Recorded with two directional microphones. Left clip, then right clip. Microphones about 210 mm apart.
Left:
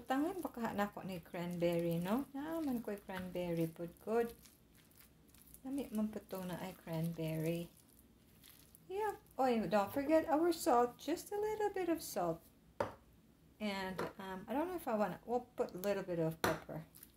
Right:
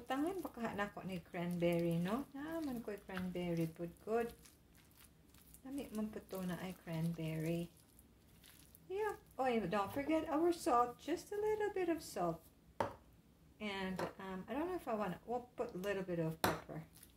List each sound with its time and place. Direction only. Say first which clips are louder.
0.1 s speech: left 2 dB; 30° left (ahead or behind)
5.8 s speech: left 3 dB; 30° left (ahead or behind)
8.9 s speech: left 2 dB; 30° left (ahead or behind)
13.6 s speech: left 1 dB; 30° left (ahead or behind)